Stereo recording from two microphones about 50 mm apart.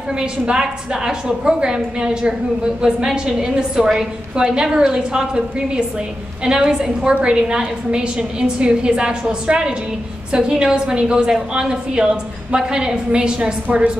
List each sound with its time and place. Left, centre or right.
0.2 s a woman's voice: centre